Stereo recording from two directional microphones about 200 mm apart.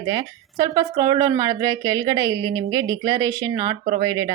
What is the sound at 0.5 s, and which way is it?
A woman's voice, 20° right (ahead or behind).